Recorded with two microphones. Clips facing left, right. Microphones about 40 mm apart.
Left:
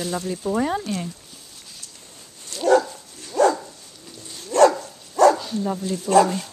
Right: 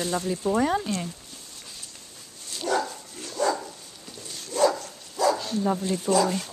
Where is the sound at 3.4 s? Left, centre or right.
Left.